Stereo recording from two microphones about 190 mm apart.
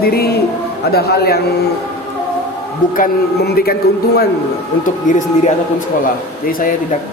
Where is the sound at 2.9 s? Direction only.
50° left (ahead or behind).